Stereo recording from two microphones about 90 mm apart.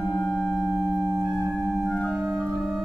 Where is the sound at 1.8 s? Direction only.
10° left (ahead or behind).